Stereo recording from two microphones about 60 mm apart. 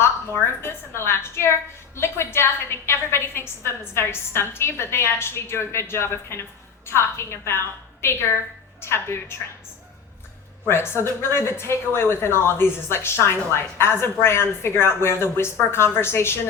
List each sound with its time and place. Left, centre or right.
0.6 s a woman's voice: left
10.7 s a woman's voice: left